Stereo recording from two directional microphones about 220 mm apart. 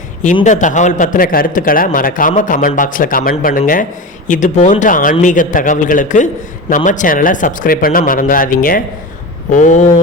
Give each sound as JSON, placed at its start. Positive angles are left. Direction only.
{"t": 0.4, "sound": "a man's voice", "side_deg": 35}